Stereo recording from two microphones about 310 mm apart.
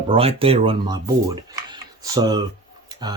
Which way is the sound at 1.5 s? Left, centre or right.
Centre.